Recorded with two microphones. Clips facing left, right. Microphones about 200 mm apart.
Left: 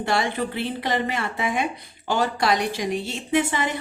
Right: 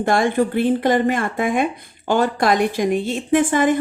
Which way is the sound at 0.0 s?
50° right (ahead or behind).